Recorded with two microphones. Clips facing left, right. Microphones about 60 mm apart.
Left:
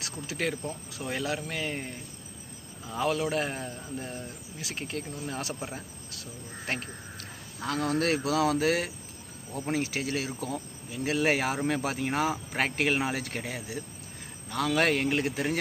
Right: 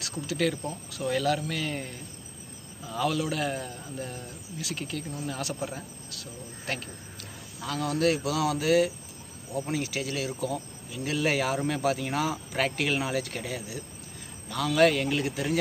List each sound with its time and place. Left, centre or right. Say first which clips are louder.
0.0 s speech: right 4 dB; left